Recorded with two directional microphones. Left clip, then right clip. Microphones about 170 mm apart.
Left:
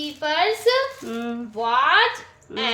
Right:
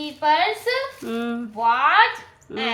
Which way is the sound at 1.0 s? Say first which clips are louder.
Right 2 dB; 25° right (ahead or behind).